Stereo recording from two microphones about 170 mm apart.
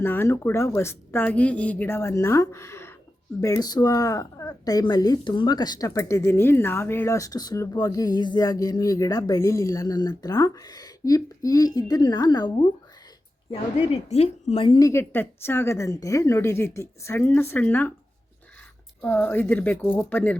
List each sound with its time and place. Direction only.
0.0 s a woman's voice: 15° left (ahead or behind)
14.1 s a woman's voice: 40° left (ahead or behind); by 17.9 s 10° left (ahead or behind)
19.0 s a woman's voice: 10° left (ahead or behind)